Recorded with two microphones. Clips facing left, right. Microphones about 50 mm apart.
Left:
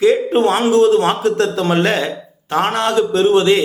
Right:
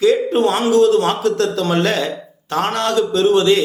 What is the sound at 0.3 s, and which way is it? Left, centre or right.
A man's voice, left.